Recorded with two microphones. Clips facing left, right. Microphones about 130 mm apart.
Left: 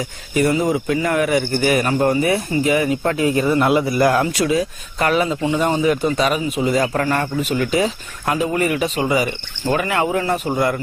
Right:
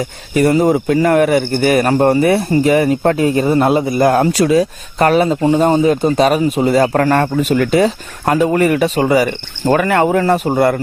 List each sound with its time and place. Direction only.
0.0 s a man's voice: 50° right (ahead or behind)
2.7 s a man's voice: 50° right (ahead or behind)
3.2 s speech: 30° right (ahead or behind)
6.1 s a man's voice: 45° right (ahead or behind)